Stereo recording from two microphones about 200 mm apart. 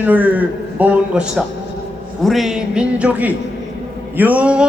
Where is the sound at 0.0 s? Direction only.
10° right (ahead or behind).